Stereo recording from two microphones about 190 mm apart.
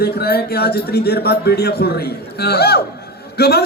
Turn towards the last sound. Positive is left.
turn(degrees=55)  # may be behind; listen again after turning